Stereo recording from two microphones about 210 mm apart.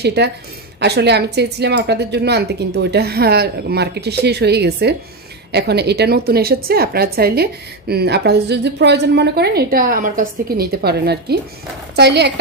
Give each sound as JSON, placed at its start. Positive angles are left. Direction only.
{"t": 0.0, "sound": "speech", "side_deg": -50}